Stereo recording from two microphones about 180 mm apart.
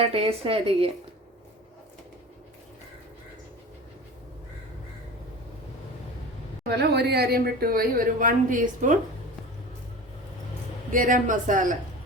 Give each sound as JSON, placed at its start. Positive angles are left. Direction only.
{"t": 0.0, "sound": "speech", "side_deg": -35}
{"t": 6.7, "sound": "speech", "side_deg": -65}
{"t": 10.9, "sound": "speech", "side_deg": -45}